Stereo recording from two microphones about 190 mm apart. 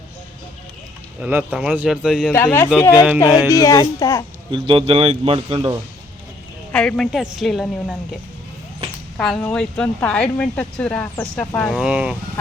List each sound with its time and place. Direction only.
1.2 s speech: 10° right (ahead or behind)
2.3 s speech: 10° left (ahead or behind)
4.5 s speech: 25° right (ahead or behind)
6.7 s speech: 5° left (ahead or behind)
9.1 s speech: 5° left (ahead or behind)